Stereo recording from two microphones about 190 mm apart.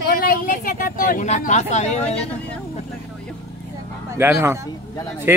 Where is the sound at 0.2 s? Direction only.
50° left (ahead or behind).